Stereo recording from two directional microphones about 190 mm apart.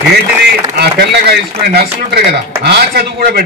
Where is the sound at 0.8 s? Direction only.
60° right (ahead or behind).